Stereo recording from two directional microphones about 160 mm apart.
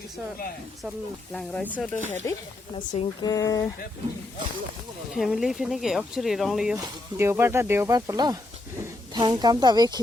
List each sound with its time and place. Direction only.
1.3 s speech: 5° left (ahead or behind)
3.2 s speech: 20° left (ahead or behind)
5.1 s speech: centre (ahead or behind)
7.2 s speech: 15° right (ahead or behind)